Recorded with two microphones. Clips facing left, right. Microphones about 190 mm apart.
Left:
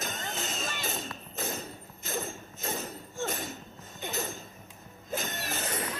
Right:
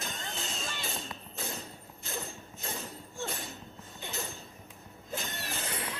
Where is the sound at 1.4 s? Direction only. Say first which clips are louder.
Left 4 dB; 45° left (ahead or behind).